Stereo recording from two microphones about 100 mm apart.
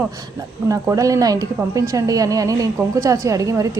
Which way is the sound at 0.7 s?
35° right (ahead or behind).